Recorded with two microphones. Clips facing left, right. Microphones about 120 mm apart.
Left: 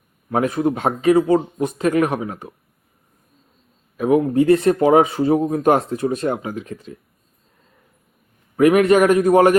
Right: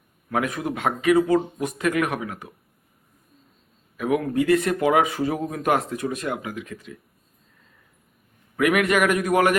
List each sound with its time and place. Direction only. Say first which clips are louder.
0.3 s speech: left 7 dB; 30° left (ahead or behind)
3.9 s speech: left 6 dB; 30° left (ahead or behind)
8.5 s speech: left 7 dB; 30° left (ahead or behind)